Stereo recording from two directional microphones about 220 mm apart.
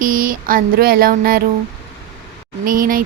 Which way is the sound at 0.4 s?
40° right (ahead or behind).